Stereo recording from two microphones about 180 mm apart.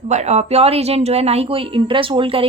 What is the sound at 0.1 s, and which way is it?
Speech, 40° right (ahead or behind).